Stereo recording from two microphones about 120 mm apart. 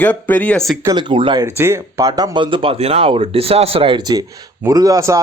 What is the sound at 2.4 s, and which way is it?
Speech, 45° right (ahead or behind).